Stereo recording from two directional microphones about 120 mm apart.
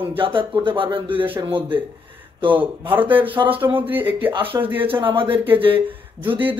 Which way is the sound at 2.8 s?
45° right (ahead or behind).